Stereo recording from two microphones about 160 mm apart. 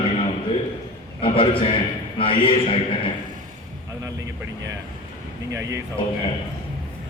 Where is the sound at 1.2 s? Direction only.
35° left (ahead or behind).